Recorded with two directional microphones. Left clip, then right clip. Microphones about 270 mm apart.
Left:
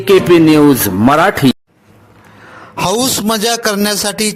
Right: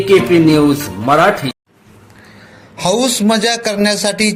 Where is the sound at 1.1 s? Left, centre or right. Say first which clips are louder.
Even; left.